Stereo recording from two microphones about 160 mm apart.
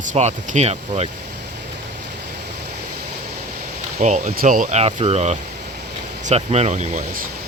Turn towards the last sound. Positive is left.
turn(degrees=-45)  # may be behind; listen again after turning